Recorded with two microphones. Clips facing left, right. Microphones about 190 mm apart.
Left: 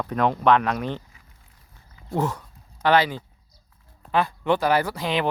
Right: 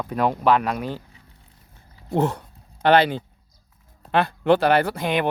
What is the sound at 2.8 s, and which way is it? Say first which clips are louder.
Speech: right 3 dB; 60° right (ahead or behind).